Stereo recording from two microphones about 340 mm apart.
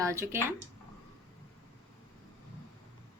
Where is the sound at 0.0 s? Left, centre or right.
Centre.